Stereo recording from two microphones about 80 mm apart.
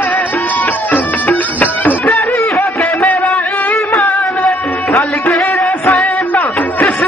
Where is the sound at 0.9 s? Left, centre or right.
Left.